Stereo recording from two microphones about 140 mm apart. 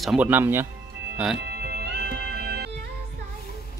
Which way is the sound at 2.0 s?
90° right.